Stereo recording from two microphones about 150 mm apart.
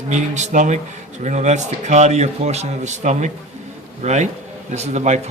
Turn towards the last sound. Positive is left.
turn(degrees=-50)  # may be behind; listen again after turning